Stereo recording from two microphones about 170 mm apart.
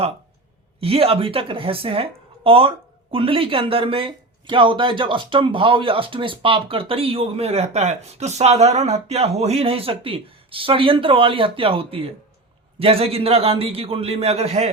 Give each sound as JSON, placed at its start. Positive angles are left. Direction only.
{"t": 0.8, "sound": "a woman's voice", "side_deg": -35}